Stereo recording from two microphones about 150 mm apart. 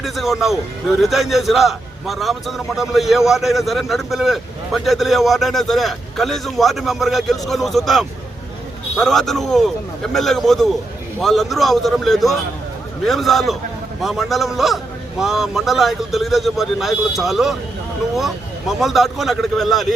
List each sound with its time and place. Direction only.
0.0 s a man's voice: centre (ahead or behind)
18.8 s a man's voice: centre (ahead or behind)